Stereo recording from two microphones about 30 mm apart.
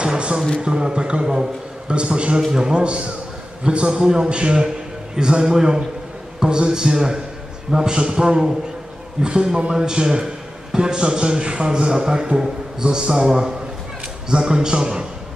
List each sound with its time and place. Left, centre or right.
0.6 s a man's voice: right